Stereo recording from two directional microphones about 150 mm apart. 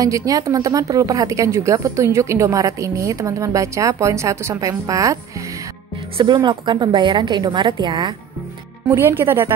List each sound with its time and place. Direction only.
0.0 s a woman's voice: 25° right (ahead or behind)
6.1 s a woman's voice: 30° right (ahead or behind)
8.8 s speech: 15° right (ahead or behind)